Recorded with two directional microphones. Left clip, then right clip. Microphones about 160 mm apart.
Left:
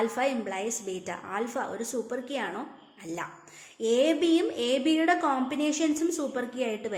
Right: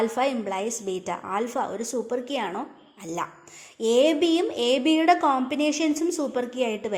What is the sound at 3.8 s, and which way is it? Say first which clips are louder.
A woman's voice: right 4 dB; 35° right (ahead or behind).